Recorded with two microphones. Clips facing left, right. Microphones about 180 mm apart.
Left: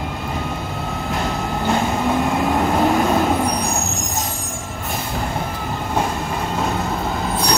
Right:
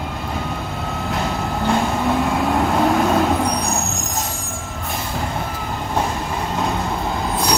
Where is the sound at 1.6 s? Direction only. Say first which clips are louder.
Even; centre (ahead or behind).